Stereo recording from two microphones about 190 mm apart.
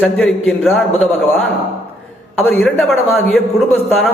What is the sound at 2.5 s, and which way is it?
A man's voice, centre (ahead or behind).